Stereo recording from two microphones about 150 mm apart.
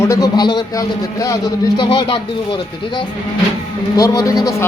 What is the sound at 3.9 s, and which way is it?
Speech, 25° left (ahead or behind).